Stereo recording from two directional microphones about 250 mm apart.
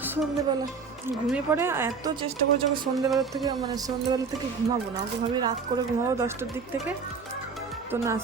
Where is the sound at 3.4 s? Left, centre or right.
Centre.